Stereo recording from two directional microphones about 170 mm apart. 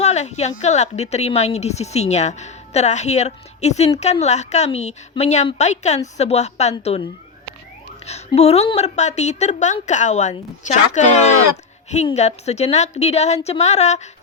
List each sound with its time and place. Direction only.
0.0 s a woman's voice: 40° left (ahead or behind)
8.4 s a woman's voice: 40° left (ahead or behind)